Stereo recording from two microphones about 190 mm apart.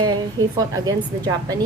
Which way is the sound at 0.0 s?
20° right (ahead or behind).